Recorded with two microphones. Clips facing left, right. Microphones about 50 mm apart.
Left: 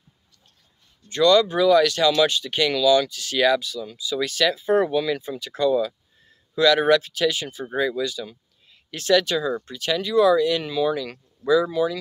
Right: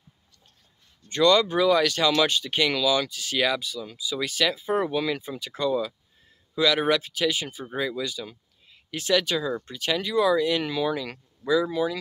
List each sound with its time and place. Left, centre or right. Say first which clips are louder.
1.0 s speech: left 3 dB; right
2.6 s speech: left 6 dB; centre
7.7 s speech: left 5 dB; centre
8.0 s speech: left 4 dB; right
10.6 s speech: left 3 dB; right